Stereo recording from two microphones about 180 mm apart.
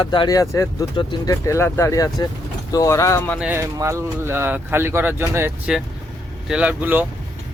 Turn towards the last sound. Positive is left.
turn(degrees=-10)  # may be behind; listen again after turning